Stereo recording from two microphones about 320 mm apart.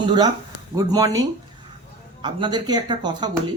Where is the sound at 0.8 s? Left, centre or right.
Centre.